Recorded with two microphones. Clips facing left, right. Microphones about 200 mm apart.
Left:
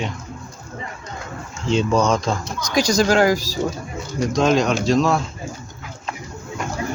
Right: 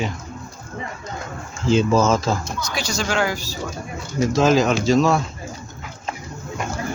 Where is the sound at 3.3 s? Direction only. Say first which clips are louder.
Left 5 dB; 90° left.